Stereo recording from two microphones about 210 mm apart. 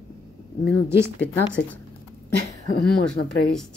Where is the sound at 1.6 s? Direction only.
50° left (ahead or behind).